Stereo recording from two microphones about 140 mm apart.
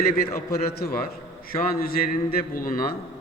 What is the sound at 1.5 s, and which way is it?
Speech, 90° left.